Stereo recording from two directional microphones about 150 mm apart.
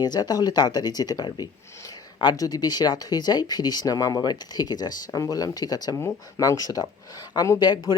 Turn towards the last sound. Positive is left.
turn(degrees=30)  # may be behind; listen again after turning